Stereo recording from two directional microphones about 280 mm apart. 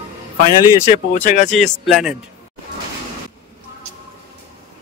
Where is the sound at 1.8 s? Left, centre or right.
Centre.